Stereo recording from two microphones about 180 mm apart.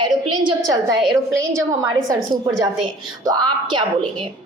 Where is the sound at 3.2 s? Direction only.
25° right (ahead or behind).